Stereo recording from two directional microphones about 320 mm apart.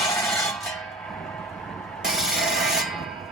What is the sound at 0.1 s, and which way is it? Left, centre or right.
Music, centre.